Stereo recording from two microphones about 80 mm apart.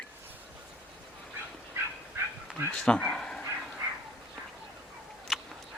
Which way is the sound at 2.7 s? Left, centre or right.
Centre.